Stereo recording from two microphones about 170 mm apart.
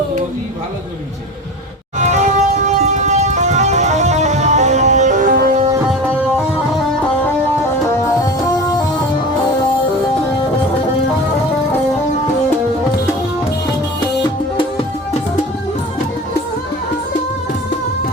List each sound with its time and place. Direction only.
2.0 s music: 45° right (ahead or behind)
7.9 s music: 15° left (ahead or behind)